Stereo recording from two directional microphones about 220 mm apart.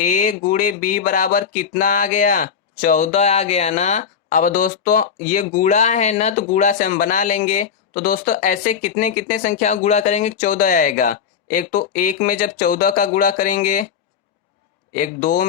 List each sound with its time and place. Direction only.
0.0 s speech: 35° left (ahead or behind)
14.9 s speech: 40° left (ahead or behind)